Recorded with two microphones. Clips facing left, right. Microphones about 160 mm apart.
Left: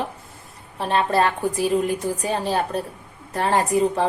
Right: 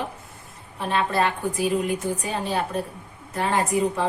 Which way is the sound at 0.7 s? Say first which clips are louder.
Left 3 dB; 35° left (ahead or behind).